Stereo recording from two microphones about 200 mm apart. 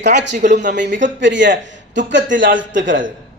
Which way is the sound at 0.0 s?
60° right (ahead or behind).